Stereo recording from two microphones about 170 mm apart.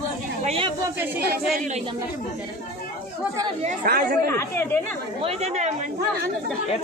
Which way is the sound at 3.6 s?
60° right (ahead or behind).